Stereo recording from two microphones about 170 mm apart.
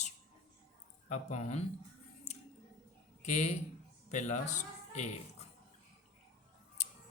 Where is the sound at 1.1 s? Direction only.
45° left (ahead or behind).